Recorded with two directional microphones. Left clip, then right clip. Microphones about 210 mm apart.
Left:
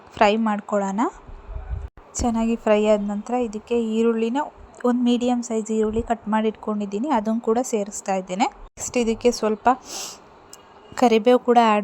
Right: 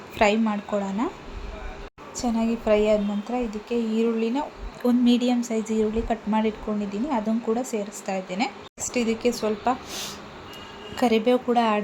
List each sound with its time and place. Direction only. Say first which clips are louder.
0.2 s a woman's voice: left 3 dB; 30° left (ahead or behind)
2.1 s a woman's voice: left 3 dB; 40° left (ahead or behind)
6.9 s a woman's voice: left 5 dB; 45° left (ahead or behind)